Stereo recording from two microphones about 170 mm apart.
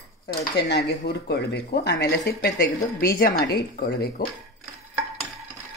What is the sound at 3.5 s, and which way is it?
Speech, 70° left (ahead or behind).